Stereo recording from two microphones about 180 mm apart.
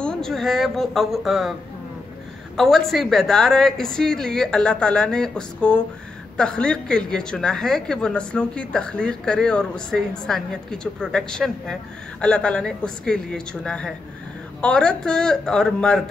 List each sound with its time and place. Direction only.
0.0 s speech: 5° left (ahead or behind)
2.5 s speech: centre (ahead or behind)